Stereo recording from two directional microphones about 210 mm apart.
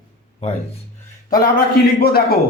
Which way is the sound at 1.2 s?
40° left (ahead or behind).